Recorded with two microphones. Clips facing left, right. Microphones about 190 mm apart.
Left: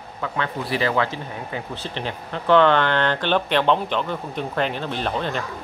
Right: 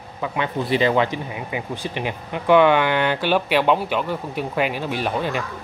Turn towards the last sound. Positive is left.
turn(degrees=-10)  # may be behind; listen again after turning